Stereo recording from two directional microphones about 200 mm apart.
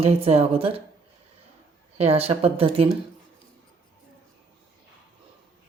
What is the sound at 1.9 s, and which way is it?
Speech, 30° right (ahead or behind).